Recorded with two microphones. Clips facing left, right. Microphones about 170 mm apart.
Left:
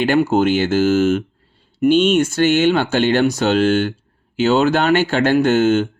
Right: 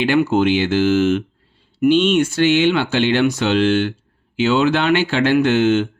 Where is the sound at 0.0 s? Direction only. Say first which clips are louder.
Left 1 dB; 45° left (ahead or behind).